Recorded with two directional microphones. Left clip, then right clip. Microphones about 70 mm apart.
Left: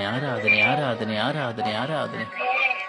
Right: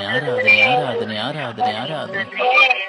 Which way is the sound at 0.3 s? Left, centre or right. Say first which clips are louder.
Right 7 dB; right.